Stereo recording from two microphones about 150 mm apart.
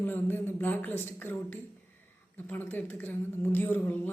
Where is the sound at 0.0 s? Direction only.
15° left (ahead or behind).